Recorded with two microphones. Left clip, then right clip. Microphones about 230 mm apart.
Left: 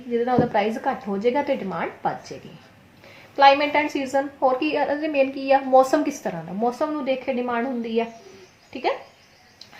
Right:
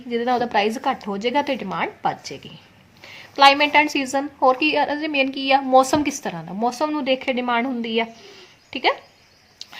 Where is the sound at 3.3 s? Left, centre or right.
Right.